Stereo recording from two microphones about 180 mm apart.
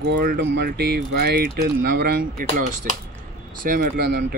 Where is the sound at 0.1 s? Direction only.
60° right (ahead or behind).